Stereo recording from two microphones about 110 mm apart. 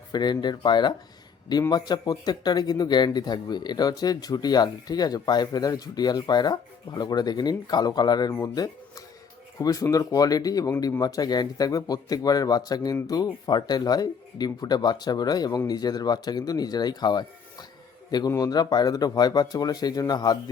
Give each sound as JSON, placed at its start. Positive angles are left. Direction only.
{"t": 0.1, "sound": "speech", "side_deg": 40}